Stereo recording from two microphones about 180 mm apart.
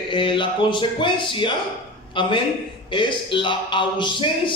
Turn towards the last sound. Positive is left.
turn(degrees=25)  # may be behind; listen again after turning